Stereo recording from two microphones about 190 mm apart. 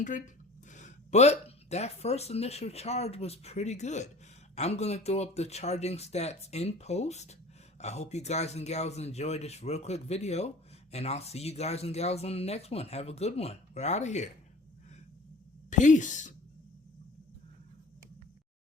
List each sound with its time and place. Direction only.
0.7 s speech: 40° left (ahead or behind)
15.7 s speech: 40° left (ahead or behind)